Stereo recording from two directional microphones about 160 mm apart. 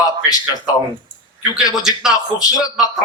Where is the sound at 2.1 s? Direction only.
25° left (ahead or behind).